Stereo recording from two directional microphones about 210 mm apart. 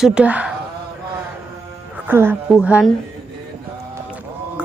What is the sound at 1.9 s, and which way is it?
Music, 10° right (ahead or behind).